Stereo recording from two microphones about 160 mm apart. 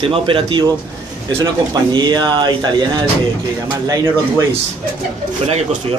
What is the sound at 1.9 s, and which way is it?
Speech, 25° right (ahead or behind).